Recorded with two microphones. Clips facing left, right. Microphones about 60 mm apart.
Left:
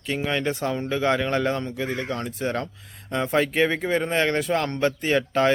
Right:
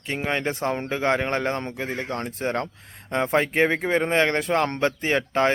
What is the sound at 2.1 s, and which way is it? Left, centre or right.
Speech, right.